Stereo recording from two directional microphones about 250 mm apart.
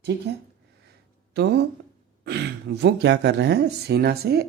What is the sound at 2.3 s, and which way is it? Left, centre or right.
Speech, right.